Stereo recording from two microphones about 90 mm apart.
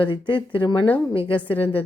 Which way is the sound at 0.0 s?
75° left (ahead or behind).